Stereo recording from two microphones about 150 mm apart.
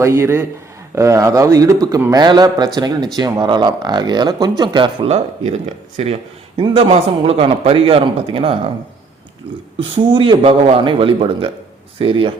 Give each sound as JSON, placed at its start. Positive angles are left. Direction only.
{"t": 0.0, "sound": "a man's voice", "side_deg": -15}
{"t": 5.0, "sound": "a man's voice", "side_deg": -45}
{"t": 9.8, "sound": "a man's voice", "side_deg": -35}